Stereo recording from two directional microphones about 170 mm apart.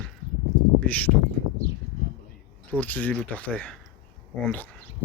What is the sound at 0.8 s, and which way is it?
Speech, 10° left (ahead or behind).